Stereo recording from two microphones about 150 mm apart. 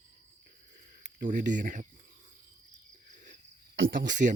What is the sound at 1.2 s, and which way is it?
Speech, 60° right (ahead or behind).